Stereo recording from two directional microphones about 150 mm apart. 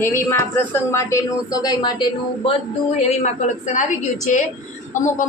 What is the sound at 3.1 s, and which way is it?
Speech, 50° left (ahead or behind).